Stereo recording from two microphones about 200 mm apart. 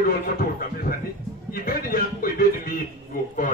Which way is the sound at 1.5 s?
45° left (ahead or behind).